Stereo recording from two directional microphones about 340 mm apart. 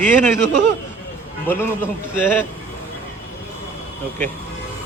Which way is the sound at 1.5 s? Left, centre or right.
Centre.